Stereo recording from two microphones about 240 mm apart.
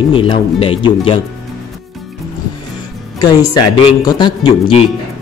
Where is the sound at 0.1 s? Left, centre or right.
Left.